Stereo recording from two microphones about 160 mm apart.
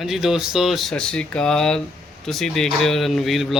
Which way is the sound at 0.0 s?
Centre (ahead or behind).